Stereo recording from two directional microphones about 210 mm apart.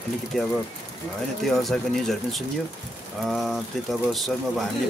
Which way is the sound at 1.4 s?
Centre (ahead or behind).